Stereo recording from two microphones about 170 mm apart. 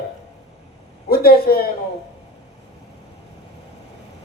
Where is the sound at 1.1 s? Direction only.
60° left (ahead or behind).